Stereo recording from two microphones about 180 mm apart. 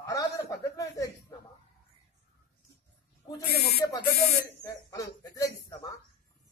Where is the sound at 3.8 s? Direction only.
20° left (ahead or behind).